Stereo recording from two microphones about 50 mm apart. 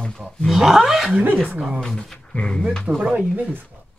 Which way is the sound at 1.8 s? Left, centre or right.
Centre.